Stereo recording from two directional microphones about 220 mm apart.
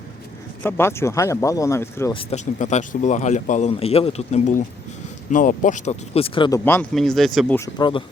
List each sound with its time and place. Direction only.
0.6 s speech: 10° left (ahead or behind)
2.1 s a man's voice: 30° left (ahead or behind)
6.7 s speech: 5° left (ahead or behind)